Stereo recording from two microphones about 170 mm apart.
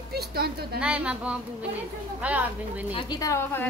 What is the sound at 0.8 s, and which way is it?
Speech, 5° right (ahead or behind).